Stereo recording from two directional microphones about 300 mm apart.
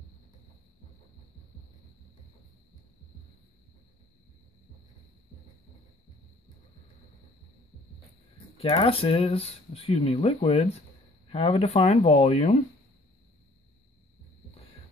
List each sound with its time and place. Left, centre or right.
8.5 s speech: centre